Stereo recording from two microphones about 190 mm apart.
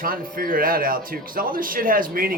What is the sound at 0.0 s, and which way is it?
Speech, 50° right (ahead or behind).